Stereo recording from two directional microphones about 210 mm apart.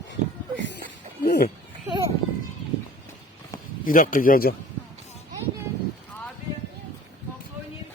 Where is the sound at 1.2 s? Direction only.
50° left (ahead or behind).